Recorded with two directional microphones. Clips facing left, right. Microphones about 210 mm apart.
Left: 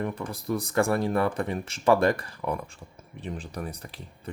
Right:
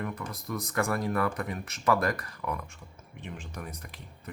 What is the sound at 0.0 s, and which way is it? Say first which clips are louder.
Speech: left 5 dB; 30° left (ahead or behind).